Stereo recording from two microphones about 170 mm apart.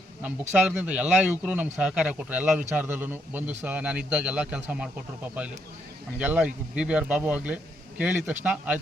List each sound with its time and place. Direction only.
0.2 s speech: 10° right (ahead or behind)
6.1 s speech: 5° right (ahead or behind)